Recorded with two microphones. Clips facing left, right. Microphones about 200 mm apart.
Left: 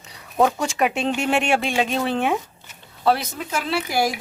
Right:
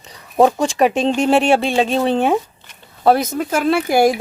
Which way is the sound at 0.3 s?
35° right (ahead or behind).